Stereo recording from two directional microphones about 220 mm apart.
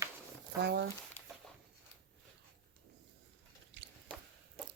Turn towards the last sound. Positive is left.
turn(degrees=-55)  # may be behind; listen again after turning